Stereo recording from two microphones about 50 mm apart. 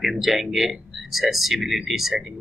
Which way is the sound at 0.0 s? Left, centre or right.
Centre.